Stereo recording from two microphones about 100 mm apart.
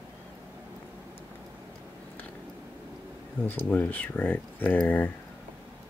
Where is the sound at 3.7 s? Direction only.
20° left (ahead or behind).